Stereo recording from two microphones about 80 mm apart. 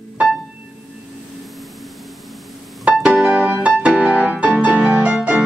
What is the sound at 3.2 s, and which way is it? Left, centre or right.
Music, centre.